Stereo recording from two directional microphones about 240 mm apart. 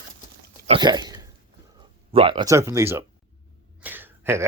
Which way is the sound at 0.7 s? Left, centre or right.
Centre.